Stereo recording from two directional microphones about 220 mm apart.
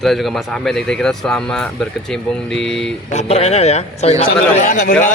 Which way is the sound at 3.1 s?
30° left (ahead or behind).